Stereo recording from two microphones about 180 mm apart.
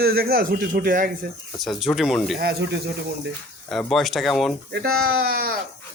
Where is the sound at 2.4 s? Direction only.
65° right (ahead or behind).